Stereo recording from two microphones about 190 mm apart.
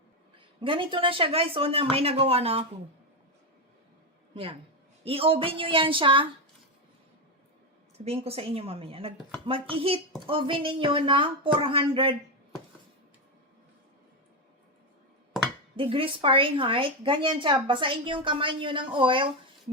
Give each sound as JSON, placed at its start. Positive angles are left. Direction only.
{"t": 0.3, "sound": "a woman's voice", "side_deg": -25}
{"t": 5.0, "sound": "a woman's voice", "side_deg": -30}
{"t": 7.9, "sound": "a woman's voice", "side_deg": -30}
{"t": 15.7, "sound": "a woman's voice", "side_deg": -30}